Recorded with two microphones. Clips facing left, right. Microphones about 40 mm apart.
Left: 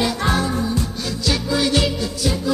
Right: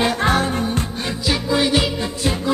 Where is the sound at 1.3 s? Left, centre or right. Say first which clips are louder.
Right 1 dB; right.